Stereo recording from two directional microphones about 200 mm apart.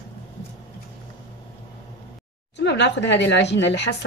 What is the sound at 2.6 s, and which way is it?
A woman's voice, 60° left (ahead or behind).